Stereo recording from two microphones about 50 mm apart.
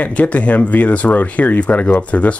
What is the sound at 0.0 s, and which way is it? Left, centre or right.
Speech, left.